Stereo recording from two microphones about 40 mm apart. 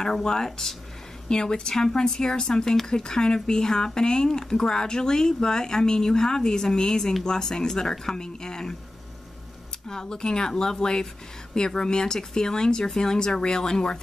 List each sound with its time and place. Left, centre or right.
0.0 s a woman's voice: centre
9.8 s speech: centre